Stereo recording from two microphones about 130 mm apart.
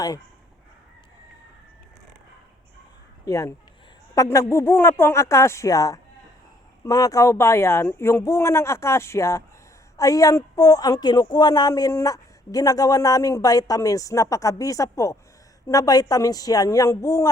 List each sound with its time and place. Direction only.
3.2 s a woman's voice: 25° left (ahead or behind)